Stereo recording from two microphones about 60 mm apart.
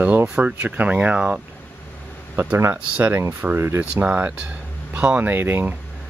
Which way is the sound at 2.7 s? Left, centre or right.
Right.